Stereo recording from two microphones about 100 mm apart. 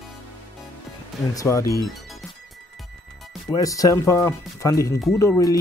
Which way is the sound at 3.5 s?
35° left (ahead or behind).